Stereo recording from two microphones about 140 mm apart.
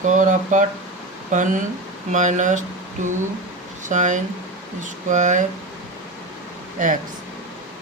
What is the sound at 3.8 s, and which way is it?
Speech, 60° right (ahead or behind).